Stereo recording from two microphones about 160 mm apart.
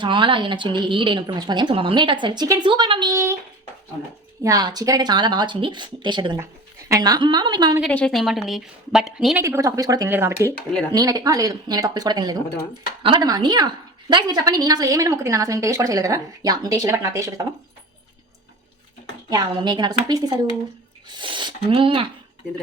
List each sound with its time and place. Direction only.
0.0 s a woman's voice: 30° right (ahead or behind)
4.4 s a woman's voice: 25° right (ahead or behind)
7.8 s a woman's voice: 5° left (ahead or behind)
9.4 s a woman's voice: 20° right (ahead or behind)
19.3 s a woman's voice: 25° right (ahead or behind)